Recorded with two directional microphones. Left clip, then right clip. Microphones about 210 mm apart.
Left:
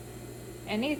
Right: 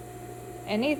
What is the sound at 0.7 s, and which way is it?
Speech, 40° right (ahead or behind).